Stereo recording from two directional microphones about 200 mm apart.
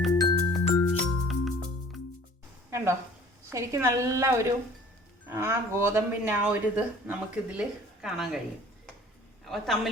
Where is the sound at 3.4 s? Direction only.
15° right (ahead or behind).